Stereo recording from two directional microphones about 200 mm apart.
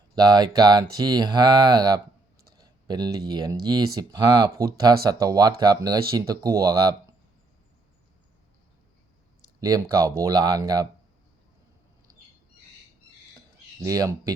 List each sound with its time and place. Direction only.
0.2 s speech: 20° right (ahead or behind)
9.6 s speech: 20° right (ahead or behind)
13.8 s speech: 15° right (ahead or behind)